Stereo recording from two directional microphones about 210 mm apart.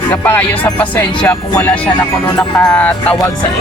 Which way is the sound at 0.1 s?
10° left (ahead or behind).